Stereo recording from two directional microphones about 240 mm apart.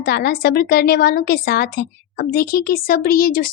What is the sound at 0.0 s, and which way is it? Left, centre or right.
A woman's voice, left.